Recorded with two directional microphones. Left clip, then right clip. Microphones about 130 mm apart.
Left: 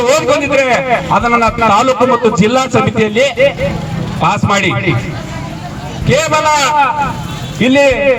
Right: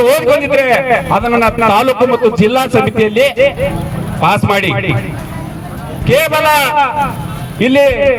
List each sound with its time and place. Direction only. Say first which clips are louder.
0.0 s a man's voice: right 1 dB; 35° right (ahead or behind)
6.1 s a man's voice: right 1 dB; 35° right (ahead or behind)